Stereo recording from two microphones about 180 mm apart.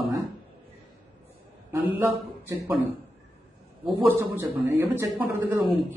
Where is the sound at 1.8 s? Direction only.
15° right (ahead or behind).